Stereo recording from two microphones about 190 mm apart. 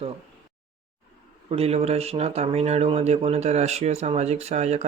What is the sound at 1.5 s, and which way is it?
Speech, 30° right (ahead or behind).